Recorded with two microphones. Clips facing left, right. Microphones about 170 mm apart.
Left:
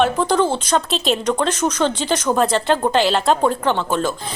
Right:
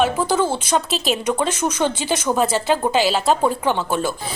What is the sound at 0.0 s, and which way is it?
Speech, 5° right (ahead or behind).